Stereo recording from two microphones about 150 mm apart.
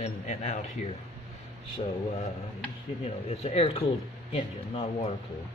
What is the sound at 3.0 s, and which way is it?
Speech, 45° left (ahead or behind).